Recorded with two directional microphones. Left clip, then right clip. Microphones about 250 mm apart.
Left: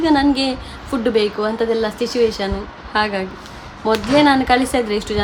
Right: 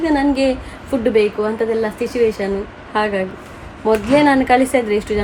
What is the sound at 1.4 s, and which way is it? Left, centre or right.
Speech, left.